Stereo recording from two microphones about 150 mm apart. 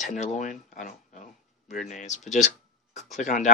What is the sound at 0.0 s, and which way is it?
Speech, 55° left (ahead or behind).